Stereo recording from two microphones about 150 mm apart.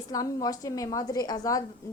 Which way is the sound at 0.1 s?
25° left (ahead or behind).